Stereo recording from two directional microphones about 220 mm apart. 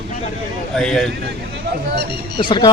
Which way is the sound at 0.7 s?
5° left (ahead or behind).